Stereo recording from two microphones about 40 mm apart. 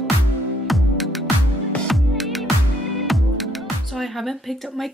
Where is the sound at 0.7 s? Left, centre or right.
Centre.